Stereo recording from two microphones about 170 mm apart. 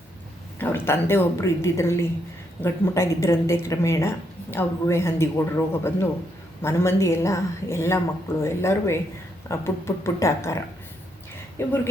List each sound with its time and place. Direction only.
0.6 s a woman's voice: 15° left (ahead or behind)
11.6 s a woman's voice: 15° left (ahead or behind)